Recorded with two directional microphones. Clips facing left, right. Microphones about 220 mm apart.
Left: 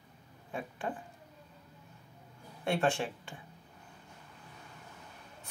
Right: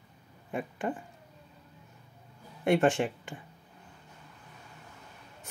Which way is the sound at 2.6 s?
15° right (ahead or behind).